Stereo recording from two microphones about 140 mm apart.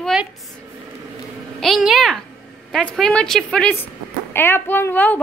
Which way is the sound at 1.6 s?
Centre (ahead or behind).